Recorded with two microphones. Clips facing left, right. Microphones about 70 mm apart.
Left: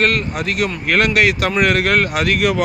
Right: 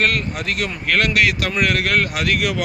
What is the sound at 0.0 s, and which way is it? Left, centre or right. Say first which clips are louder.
Speech: left 3 dB; centre.